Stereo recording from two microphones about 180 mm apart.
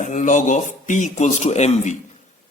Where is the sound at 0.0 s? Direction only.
40° left (ahead or behind).